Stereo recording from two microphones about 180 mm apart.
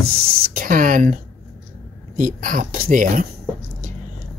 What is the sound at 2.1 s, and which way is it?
Speech, 45° right (ahead or behind).